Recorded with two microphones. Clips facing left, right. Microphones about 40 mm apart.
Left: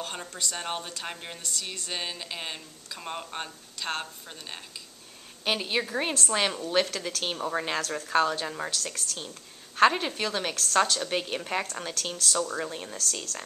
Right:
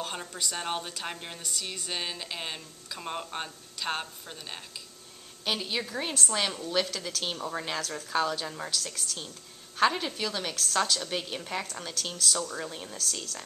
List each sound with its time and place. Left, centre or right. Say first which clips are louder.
0.0 s a woman's voice: even; centre
5.4 s a woman's voice: left 3 dB; left
8.7 s a woman's voice: left 1 dB; centre
11.9 s a woman's voice: right 1 dB; centre
12.9 s a woman's voice: left 2 dB; centre